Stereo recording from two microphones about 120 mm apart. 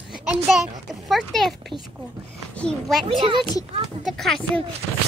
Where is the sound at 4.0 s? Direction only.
Centre (ahead or behind).